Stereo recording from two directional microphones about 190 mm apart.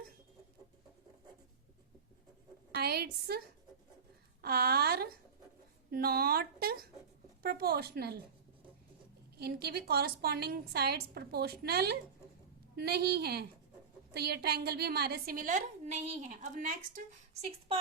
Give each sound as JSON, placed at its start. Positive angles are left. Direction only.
{"t": 2.7, "sound": "a woman's voice", "side_deg": -55}
{"t": 9.4, "sound": "a woman's voice", "side_deg": -55}